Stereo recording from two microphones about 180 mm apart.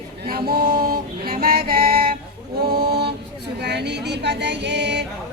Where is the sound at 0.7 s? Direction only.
55° right (ahead or behind).